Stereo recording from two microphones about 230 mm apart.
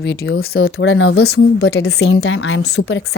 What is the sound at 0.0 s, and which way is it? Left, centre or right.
A woman's voice, left.